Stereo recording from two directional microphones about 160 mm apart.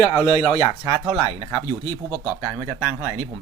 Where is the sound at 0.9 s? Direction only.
15° right (ahead or behind).